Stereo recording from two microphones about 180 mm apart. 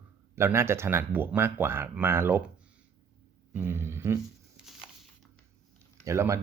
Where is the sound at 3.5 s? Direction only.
15° right (ahead or behind).